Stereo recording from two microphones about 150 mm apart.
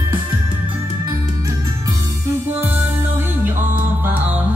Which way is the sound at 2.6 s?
15° right (ahead or behind).